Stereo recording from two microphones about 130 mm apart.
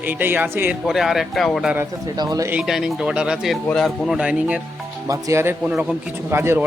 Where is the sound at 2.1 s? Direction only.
30° right (ahead or behind).